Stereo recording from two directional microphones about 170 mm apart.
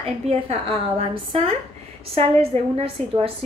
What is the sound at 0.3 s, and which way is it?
A woman's voice, 35° right (ahead or behind).